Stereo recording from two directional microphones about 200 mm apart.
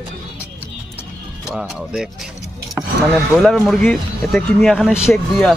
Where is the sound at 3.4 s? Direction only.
Centre (ahead or behind).